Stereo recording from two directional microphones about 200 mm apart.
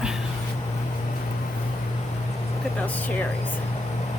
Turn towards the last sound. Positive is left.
turn(degrees=10)  # may be behind; listen again after turning